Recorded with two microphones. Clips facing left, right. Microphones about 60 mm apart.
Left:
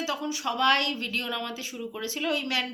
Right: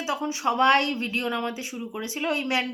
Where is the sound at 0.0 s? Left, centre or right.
Right.